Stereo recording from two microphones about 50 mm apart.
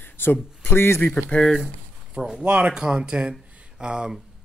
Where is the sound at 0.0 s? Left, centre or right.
Left.